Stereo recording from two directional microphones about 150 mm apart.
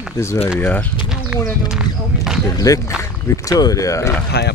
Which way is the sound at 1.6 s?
5° right (ahead or behind).